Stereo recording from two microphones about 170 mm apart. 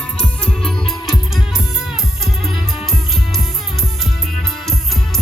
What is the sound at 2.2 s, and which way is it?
Music, centre (ahead or behind).